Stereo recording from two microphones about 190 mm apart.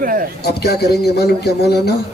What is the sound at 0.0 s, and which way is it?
Speech, 45° right (ahead or behind).